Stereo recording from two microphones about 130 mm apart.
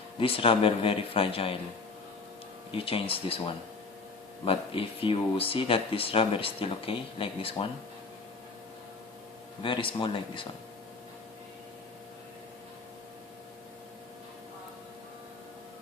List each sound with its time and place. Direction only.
0.2 s speech: 45° left (ahead or behind)
2.7 s speech: 45° left (ahead or behind)
9.6 s speech: 40° left (ahead or behind)